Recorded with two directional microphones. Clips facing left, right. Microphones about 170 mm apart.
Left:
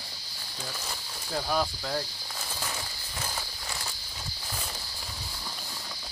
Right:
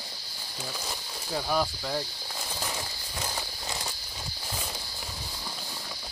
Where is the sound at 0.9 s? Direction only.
5° right (ahead or behind).